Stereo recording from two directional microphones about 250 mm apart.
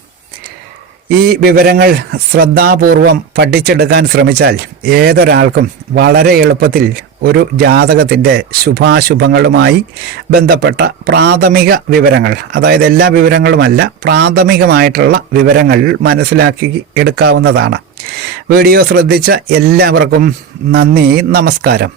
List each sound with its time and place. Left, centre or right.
1.2 s speech: right